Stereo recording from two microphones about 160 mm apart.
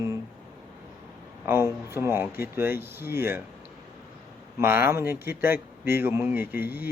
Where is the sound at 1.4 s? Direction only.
15° right (ahead or behind).